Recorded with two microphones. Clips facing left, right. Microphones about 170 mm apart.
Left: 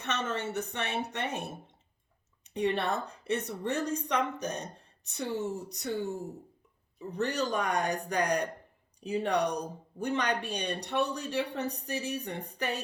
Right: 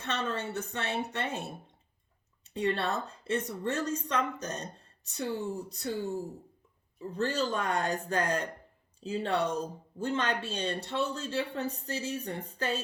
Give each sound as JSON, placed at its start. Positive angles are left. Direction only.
{"t": 0.0, "sound": "speech", "side_deg": 20}
{"t": 7.1, "sound": "speech", "side_deg": 15}